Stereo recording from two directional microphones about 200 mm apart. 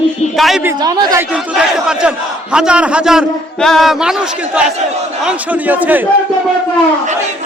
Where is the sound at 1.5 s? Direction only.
5° right (ahead or behind).